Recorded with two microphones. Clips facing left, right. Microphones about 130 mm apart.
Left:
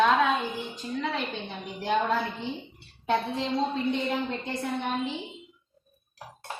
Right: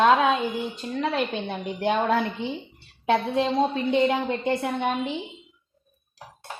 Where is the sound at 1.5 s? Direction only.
65° right (ahead or behind).